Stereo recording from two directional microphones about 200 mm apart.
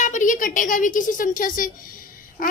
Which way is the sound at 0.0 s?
40° left (ahead or behind).